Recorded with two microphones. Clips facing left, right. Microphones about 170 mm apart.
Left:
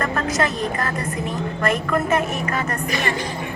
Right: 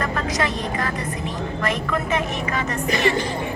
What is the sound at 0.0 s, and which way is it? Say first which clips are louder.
Vehicle: left 2 dB; 50° left (ahead or behind).